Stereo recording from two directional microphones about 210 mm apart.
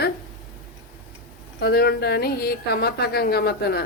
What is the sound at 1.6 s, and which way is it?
A woman's voice, 50° left (ahead or behind).